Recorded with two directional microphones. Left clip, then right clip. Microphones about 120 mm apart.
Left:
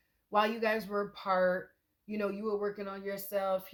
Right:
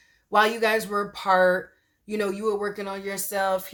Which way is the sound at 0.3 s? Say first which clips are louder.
Right 9 dB; 35° right (ahead or behind).